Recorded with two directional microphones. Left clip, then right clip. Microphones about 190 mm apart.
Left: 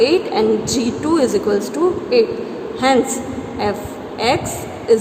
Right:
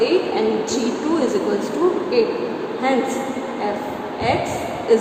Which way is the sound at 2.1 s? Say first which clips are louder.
Left 3 dB; 30° left (ahead or behind).